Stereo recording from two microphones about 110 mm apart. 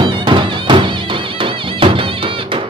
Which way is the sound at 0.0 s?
50° right (ahead or behind).